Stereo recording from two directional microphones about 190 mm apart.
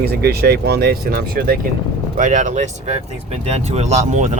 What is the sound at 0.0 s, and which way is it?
Speech, 55° right (ahead or behind).